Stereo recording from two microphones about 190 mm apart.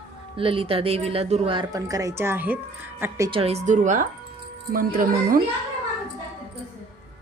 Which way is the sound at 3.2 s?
30° right (ahead or behind).